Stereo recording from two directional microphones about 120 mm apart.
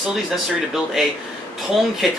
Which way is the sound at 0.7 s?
5° right (ahead or behind).